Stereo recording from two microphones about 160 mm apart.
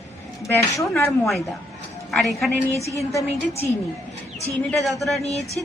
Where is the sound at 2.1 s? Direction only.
Centre (ahead or behind).